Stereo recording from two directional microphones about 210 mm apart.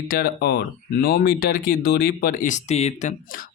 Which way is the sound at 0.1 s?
45° left (ahead or behind).